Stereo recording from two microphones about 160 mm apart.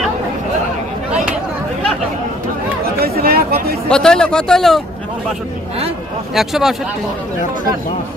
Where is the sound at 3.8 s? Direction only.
5° left (ahead or behind).